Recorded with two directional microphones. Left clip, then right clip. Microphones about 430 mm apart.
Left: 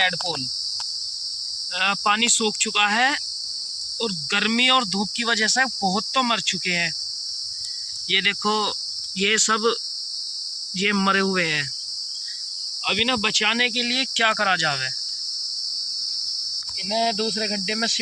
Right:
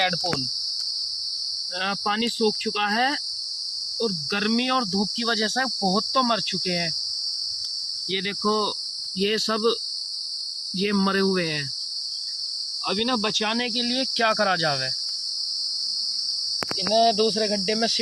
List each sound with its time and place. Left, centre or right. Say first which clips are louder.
1.8 s cricket: left 6 dB; centre
8.1 s cricket: left 5 dB; centre
10.8 s cricket: left 3 dB; centre
12.9 s cricket: left 4 dB; centre
16.9 s cricket: right 3 dB; centre